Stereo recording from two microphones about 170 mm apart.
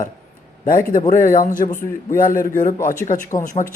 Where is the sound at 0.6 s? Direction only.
55° left (ahead or behind).